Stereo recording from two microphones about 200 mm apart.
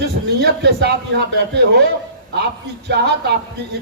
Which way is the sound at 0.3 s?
55° right (ahead or behind).